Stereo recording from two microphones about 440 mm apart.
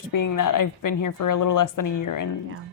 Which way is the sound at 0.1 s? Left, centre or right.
Left.